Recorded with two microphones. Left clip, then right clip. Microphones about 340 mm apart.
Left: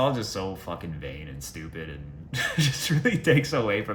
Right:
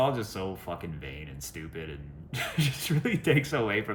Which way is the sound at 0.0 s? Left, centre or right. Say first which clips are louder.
Left 2 dB; centre.